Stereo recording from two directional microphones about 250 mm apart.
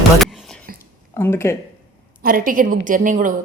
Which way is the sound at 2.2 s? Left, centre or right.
Right.